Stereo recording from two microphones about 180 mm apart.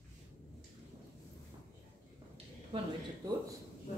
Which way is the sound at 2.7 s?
30° right (ahead or behind).